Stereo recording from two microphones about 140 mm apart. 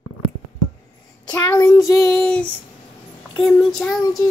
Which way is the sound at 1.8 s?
Centre (ahead or behind).